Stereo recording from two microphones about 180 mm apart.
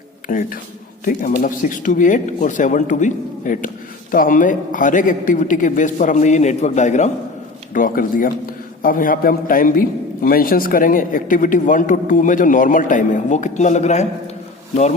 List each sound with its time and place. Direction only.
0.3 s a man's voice: 50° left (ahead or behind)